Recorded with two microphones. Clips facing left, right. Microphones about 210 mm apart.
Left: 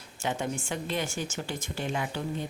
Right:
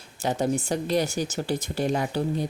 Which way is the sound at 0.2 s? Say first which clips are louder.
Right 7 dB; 35° right (ahead or behind).